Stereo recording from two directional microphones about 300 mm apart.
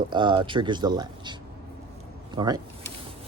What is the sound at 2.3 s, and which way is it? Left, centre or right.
Speech, centre.